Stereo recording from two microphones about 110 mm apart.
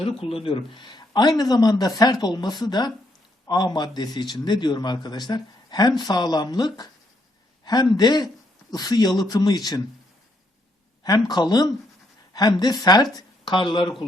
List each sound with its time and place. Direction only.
0.2 s speech: 60° left (ahead or behind); by 9.8 s 35° left (ahead or behind)
11.0 s speech: 35° left (ahead or behind)